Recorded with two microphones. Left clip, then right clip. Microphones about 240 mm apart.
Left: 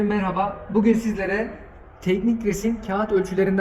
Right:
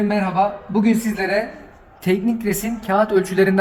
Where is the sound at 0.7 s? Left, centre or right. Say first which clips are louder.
Even; right.